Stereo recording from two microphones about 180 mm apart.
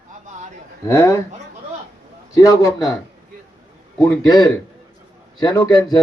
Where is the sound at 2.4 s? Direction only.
15° left (ahead or behind).